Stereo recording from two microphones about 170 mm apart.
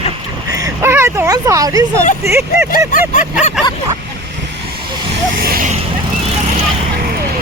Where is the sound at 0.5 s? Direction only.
15° right (ahead or behind).